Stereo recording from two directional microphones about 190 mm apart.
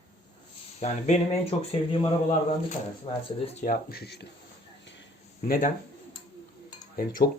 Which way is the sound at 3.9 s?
60° left (ahead or behind).